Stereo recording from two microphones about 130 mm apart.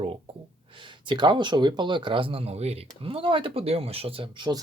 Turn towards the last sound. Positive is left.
turn(degrees=-40)  # may be behind; listen again after turning